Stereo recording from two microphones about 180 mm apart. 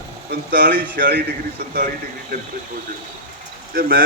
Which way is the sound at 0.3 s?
55° right (ahead or behind).